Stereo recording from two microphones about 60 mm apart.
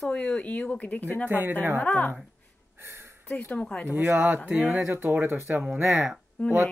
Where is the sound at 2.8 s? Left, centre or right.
Right.